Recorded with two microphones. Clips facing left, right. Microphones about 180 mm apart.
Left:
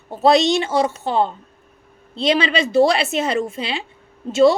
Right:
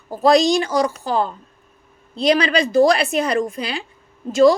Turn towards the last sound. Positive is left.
turn(degrees=25)  # may be behind; listen again after turning